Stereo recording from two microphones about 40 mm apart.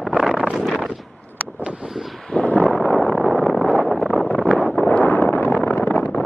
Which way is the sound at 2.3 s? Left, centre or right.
Left.